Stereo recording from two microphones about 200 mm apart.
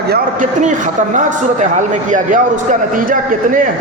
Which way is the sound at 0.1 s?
40° right (ahead or behind).